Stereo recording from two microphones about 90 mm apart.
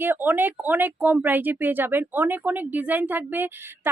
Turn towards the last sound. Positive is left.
turn(degrees=-20)  # may be behind; listen again after turning